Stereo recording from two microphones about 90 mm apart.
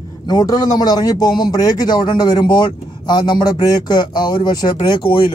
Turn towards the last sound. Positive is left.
turn(degrees=60)  # may be behind; listen again after turning